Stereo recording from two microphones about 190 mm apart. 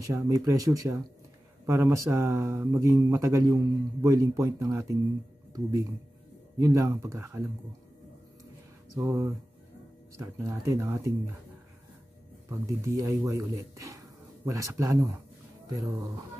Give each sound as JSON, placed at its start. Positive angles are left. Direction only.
{"t": 0.0, "sound": "speech", "side_deg": -15}
{"t": 8.9, "sound": "speech", "side_deg": -15}
{"t": 12.4, "sound": "speech", "side_deg": -15}